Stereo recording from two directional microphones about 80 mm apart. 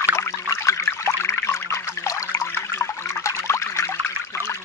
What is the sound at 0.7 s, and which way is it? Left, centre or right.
Trickle, left.